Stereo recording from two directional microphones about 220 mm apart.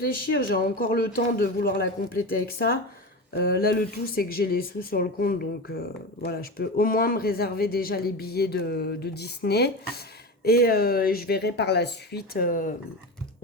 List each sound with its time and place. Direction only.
0.0 s a man's voice: 45° left (ahead or behind)
3.3 s speech: 45° left (ahead or behind)